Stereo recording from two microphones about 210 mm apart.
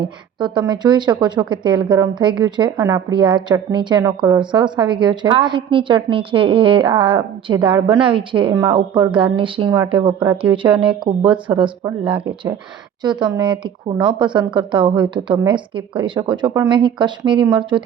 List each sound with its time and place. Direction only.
0.0 s a woman's voice: 20° right (ahead or behind)